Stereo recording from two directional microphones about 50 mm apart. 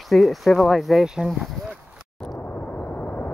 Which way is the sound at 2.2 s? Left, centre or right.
Left.